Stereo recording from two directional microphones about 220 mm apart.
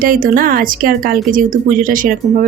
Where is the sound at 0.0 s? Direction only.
40° right (ahead or behind).